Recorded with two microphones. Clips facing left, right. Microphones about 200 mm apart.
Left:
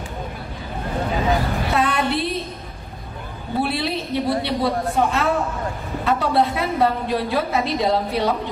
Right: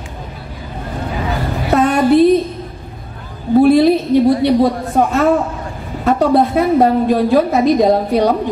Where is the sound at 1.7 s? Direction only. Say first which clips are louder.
Right 11 dB; 45° right (ahead or behind).